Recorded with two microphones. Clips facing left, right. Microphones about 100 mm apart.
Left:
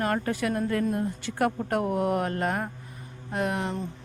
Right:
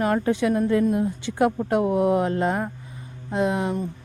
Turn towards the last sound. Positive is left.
turn(degrees=-15)  # may be behind; listen again after turning